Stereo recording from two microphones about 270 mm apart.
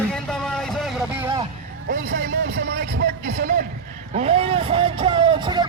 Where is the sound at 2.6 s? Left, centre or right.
Right.